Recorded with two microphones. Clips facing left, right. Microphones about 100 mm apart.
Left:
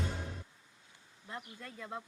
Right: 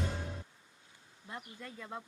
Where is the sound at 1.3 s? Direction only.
20° right (ahead or behind).